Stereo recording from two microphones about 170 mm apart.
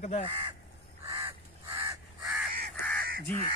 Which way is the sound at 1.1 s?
20° right (ahead or behind).